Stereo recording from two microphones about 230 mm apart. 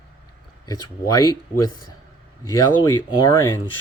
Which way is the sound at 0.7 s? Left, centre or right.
Centre.